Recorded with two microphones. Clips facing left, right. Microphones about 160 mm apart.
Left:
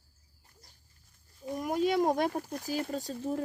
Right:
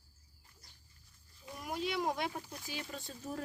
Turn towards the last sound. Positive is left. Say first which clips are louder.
# left 11 dB
turn(degrees=40)  # may be behind; listen again after turning